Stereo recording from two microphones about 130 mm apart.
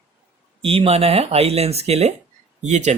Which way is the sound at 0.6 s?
50° right (ahead or behind).